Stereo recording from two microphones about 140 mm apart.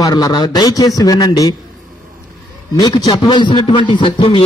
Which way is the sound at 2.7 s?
30° left (ahead or behind).